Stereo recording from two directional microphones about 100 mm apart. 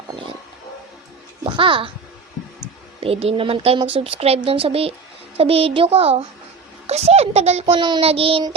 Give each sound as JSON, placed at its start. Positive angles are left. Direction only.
{"t": 1.5, "sound": "a child's voice", "side_deg": -60}
{"t": 3.0, "sound": "a child's voice", "side_deg": -85}